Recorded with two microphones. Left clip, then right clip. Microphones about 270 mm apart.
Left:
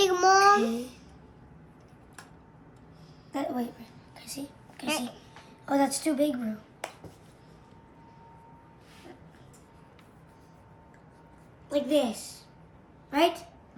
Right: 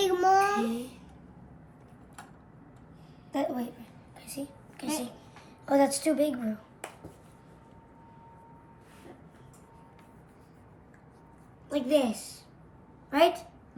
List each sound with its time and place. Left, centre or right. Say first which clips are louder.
0.0 s child singing: left 3 dB; left
0.5 s babbling: left 6 dB; centre
3.3 s a sound: right 1 dB; centre
4.9 s a child's voice: left 2 dB; centre
11.7 s a woman's voice: even; centre